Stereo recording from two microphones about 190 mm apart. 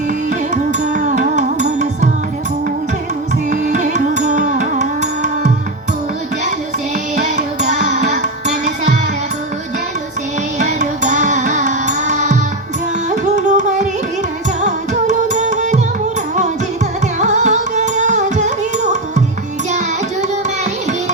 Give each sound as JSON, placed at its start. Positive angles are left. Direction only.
{"t": 0.3, "sound": "music", "side_deg": -40}
{"t": 3.5, "sound": "music", "side_deg": -40}
{"t": 7.2, "sound": "music", "side_deg": -40}
{"t": 10.6, "sound": "music", "side_deg": -40}
{"t": 13.1, "sound": "carnatic music", "side_deg": -40}
{"t": 17.2, "sound": "carnatic music", "side_deg": -40}